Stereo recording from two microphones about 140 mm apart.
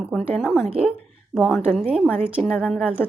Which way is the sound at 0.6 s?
45° right (ahead or behind).